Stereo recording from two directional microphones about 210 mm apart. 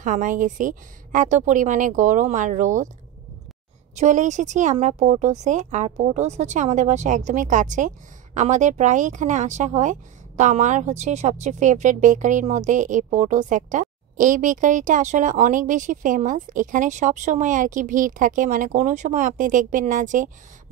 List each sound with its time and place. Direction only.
0.0 s speech: 40° right (ahead or behind)
3.9 s speech: 35° right (ahead or behind)